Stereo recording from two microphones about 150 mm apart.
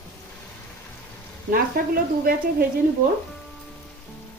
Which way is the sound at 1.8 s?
80° right.